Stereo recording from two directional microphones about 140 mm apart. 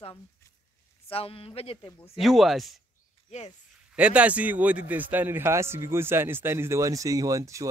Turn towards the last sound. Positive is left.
turn(degrees=-25)  # may be behind; listen again after turning